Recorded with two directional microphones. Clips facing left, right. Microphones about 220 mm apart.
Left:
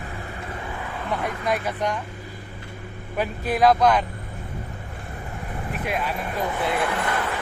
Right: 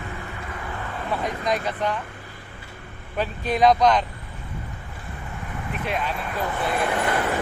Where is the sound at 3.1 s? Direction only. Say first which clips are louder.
Even; 10° left (ahead or behind).